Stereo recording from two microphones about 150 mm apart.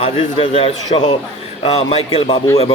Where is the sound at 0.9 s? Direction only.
50° left (ahead or behind); by 2.4 s 35° left (ahead or behind).